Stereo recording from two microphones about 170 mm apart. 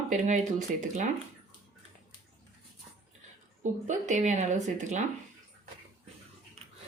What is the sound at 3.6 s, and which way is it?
Speech, 45° right (ahead or behind).